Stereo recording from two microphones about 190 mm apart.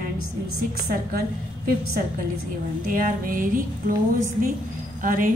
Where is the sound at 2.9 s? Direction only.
45° right (ahead or behind).